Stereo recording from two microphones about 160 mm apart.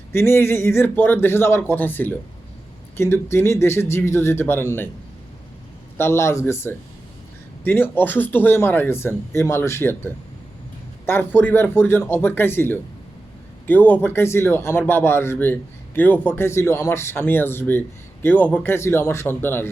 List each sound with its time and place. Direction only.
0.1 s speech: 15° left (ahead or behind)
6.0 s speech: 15° left (ahead or behind)